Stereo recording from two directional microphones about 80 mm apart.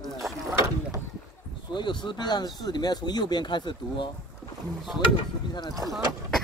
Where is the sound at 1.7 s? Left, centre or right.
Left.